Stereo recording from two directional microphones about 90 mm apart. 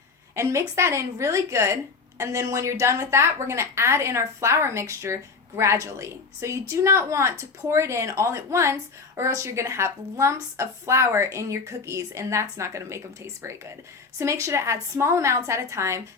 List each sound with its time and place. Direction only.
0.3 s speech: 35° right (ahead or behind)
14.2 s speech: 35° right (ahead or behind)